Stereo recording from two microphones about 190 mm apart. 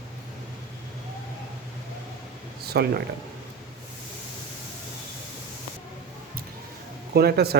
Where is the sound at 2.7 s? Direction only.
55° right (ahead or behind).